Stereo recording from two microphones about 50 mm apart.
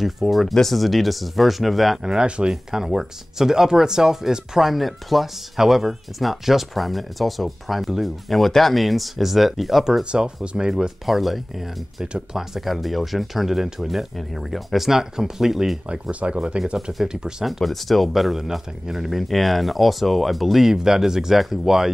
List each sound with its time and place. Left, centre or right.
0.0 s speech: centre
2.0 s speech: centre
2.5 s speech: centre
10.1 s speech: centre
10.7 s speech: centre
12.0 s speech: centre
12.5 s speech: centre
15.9 s speech: right
17.5 s speech: centre